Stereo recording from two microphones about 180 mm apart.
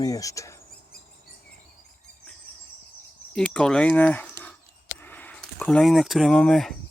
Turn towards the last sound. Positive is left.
turn(degrees=0)  # may be behind; listen again after turning